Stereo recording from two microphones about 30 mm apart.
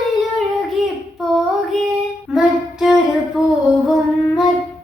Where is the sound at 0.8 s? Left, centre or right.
Centre.